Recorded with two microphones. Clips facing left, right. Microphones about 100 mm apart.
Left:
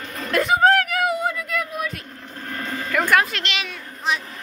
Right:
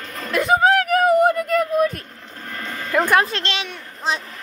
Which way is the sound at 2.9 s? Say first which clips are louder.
Right 2 dB; 25° right (ahead or behind).